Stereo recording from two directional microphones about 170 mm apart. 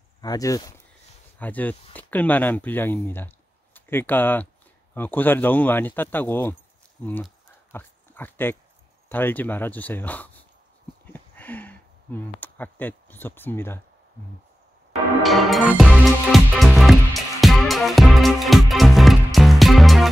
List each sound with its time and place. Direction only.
0.2 s speech: 20° left (ahead or behind)
11.1 s a sound: 10° left (ahead or behind)
15.2 s music: centre (ahead or behind)